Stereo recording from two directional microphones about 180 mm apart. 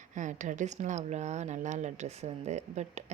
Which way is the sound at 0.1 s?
45° right (ahead or behind).